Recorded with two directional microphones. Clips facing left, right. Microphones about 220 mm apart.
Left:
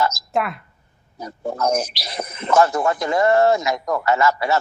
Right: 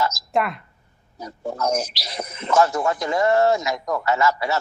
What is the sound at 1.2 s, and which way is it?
Speech, 55° left (ahead or behind).